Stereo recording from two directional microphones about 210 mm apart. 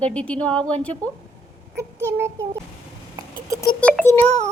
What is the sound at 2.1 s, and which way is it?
Child singing, 10° right (ahead or behind).